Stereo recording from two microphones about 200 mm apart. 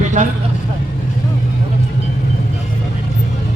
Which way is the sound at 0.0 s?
40° right (ahead or behind).